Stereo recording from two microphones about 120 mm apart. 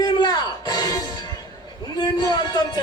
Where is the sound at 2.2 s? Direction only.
35° left (ahead or behind).